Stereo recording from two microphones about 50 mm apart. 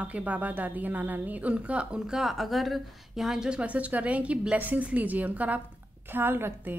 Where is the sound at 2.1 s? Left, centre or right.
Centre.